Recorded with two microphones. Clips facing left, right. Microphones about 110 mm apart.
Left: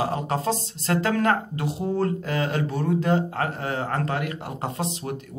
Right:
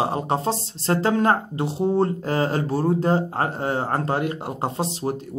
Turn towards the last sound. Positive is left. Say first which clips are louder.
# right 4 dB
turn(degrees=-30)  # may be behind; listen again after turning